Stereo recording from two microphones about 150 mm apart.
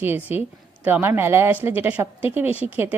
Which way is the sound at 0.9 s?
15° right (ahead or behind).